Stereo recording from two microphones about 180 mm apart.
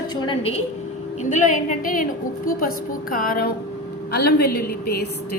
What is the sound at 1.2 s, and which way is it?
Speech, 45° left (ahead or behind).